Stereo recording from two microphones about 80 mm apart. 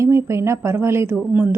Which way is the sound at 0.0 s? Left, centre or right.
Right.